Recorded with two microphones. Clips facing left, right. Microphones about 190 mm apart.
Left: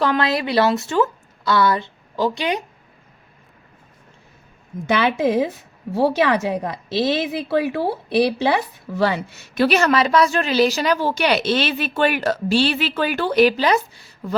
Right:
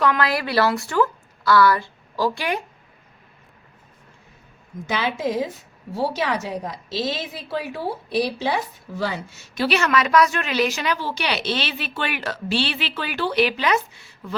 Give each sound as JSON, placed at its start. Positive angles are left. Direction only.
{"t": 0.0, "sound": "speech", "side_deg": 25}
{"t": 4.9, "sound": "a woman's voice", "side_deg": 65}